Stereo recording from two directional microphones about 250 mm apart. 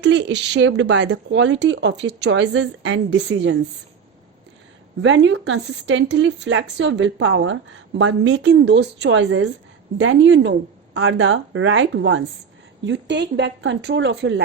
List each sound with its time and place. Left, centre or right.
0.0 s speech: right
5.0 s speech: right